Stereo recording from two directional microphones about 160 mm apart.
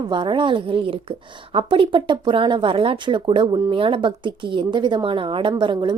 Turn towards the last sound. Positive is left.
turn(degrees=-30)  # may be behind; listen again after turning